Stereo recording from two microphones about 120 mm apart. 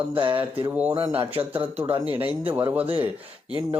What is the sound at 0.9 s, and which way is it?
Speech, 50° right (ahead or behind).